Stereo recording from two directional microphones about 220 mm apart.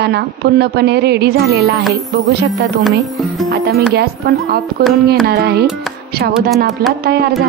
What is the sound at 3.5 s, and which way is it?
Speech, 45° right (ahead or behind).